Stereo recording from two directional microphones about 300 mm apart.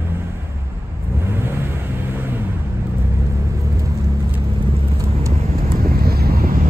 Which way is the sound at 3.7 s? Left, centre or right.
Centre.